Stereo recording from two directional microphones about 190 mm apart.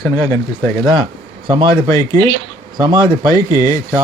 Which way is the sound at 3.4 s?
20° left (ahead or behind).